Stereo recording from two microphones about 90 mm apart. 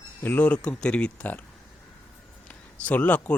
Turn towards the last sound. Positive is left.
turn(degrees=20)  # may be behind; listen again after turning